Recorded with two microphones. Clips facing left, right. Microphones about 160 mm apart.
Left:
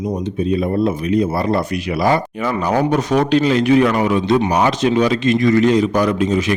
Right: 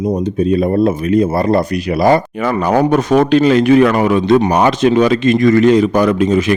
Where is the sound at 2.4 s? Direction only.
55° right (ahead or behind).